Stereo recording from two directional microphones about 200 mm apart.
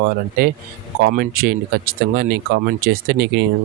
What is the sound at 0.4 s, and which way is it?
Speech, 45° right (ahead or behind).